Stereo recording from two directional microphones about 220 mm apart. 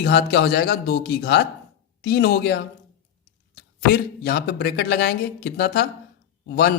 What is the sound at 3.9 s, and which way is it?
A man's voice, 45° left (ahead or behind).